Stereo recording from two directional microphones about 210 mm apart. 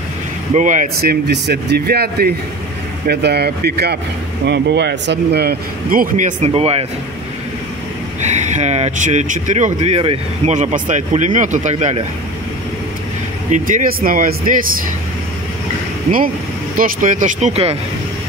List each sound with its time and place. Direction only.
0.6 s speech: 40° right (ahead or behind)
8.2 s speech: 35° right (ahead or behind)
13.5 s speech: 40° right (ahead or behind)
16.7 s speech: 40° right (ahead or behind)